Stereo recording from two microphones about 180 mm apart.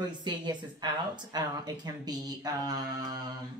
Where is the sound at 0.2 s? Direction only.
25° right (ahead or behind).